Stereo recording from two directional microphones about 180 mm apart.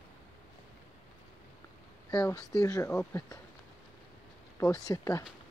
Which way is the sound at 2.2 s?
20° left (ahead or behind).